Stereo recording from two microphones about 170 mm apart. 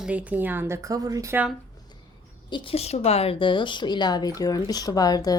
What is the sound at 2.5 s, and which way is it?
Speech, 30° left (ahead or behind).